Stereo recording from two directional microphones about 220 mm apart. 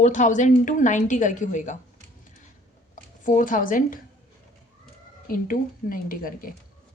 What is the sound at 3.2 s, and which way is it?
Speech, 35° left (ahead or behind).